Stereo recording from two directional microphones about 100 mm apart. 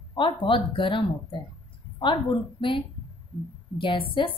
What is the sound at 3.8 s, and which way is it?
Speech, 55° left (ahead or behind).